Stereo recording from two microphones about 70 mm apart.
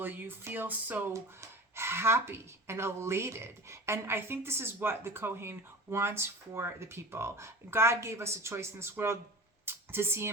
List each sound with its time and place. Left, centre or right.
0.0 s speech: right
1.1 s speech: right
9.6 s a sound: right